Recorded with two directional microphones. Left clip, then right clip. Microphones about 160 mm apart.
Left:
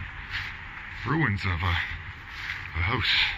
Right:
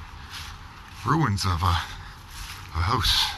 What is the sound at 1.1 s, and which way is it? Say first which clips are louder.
Speech: right 3 dB; 30° right (ahead or behind).